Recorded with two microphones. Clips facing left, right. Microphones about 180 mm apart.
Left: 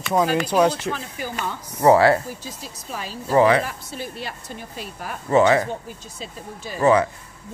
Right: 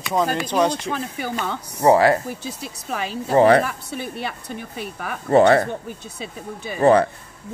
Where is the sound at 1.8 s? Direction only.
15° right (ahead or behind).